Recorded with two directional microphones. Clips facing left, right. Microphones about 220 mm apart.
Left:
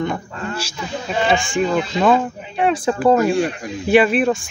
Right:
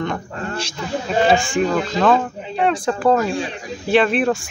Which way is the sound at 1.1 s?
40° right (ahead or behind).